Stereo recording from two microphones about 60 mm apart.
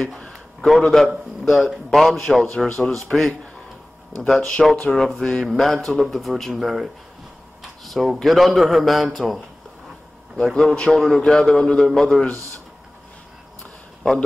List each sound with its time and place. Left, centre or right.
0.0 s a sound: centre
0.7 s a man's voice: centre
4.6 s a man's voice: centre
10.5 s a man's voice: centre
14.0 s a man's voice: centre